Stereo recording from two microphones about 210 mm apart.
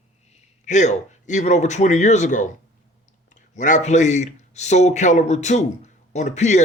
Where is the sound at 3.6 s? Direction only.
35° left (ahead or behind).